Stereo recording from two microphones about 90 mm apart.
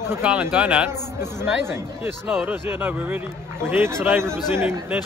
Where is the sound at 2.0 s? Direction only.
20° right (ahead or behind).